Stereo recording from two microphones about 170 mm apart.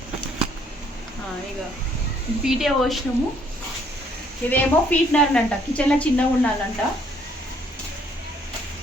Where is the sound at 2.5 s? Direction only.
Centre (ahead or behind).